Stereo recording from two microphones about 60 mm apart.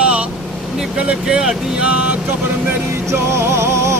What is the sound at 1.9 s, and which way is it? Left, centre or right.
Speech, right.